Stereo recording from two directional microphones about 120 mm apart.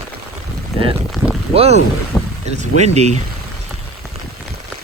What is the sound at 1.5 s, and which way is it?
Speech, 55° right (ahead or behind).